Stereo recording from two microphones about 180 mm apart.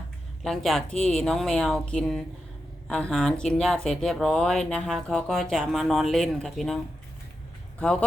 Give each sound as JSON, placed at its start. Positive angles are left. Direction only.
{"t": 0.4, "sound": "speech", "side_deg": 0}